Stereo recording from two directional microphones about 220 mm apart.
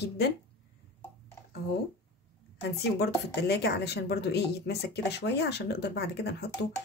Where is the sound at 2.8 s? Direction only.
50° left (ahead or behind).